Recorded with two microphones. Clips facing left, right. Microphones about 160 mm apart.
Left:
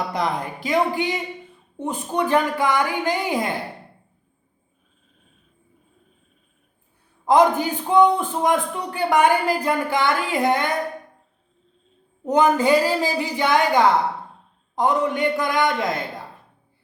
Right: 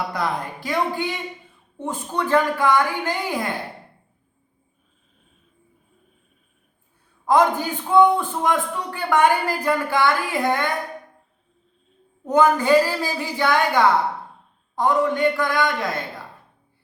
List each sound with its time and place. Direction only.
0.1 s a man's voice: 20° left (ahead or behind)
7.3 s a man's voice: 15° left (ahead or behind)
12.2 s a man's voice: 20° left (ahead or behind)